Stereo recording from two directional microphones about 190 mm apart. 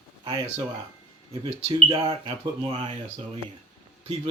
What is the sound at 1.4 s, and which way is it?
Speech, 30° right (ahead or behind).